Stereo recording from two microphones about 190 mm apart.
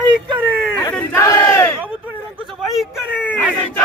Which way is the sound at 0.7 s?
10° left (ahead or behind).